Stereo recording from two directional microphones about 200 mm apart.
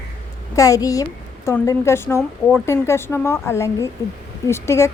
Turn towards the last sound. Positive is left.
turn(degrees=15)  # may be behind; listen again after turning